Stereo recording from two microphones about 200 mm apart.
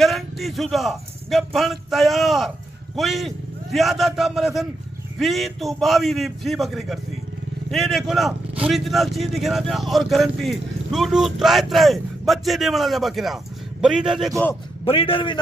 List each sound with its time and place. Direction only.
0.0 s a man's voice: centre (ahead or behind)
14.9 s a man's voice: 25° left (ahead or behind)